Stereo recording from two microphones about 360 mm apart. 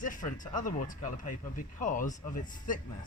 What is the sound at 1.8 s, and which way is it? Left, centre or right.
Speech, left.